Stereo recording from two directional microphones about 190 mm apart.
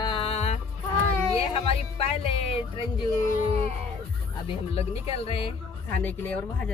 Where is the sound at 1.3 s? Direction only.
30° left (ahead or behind).